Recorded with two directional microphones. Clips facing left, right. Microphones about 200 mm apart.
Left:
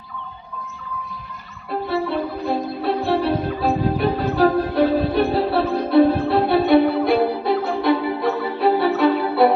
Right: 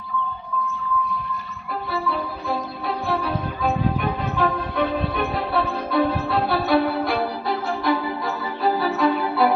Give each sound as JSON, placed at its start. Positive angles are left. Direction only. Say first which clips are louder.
{"t": 1.9, "sound": "music", "louder": "left 4 dB", "side_deg": 30}